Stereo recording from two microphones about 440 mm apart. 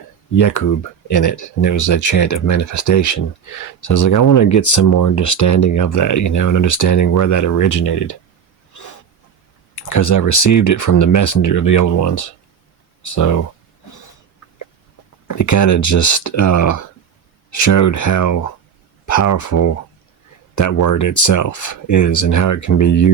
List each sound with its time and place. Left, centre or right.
0.3 s speech: left
8.7 s a sound: left
9.7 s speech: left
15.4 s speech: left